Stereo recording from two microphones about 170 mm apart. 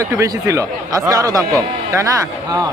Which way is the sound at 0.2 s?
20° right (ahead or behind).